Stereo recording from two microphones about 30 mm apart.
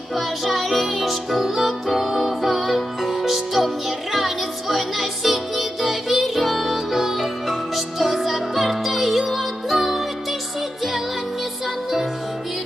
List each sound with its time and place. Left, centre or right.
0.1 s music: centre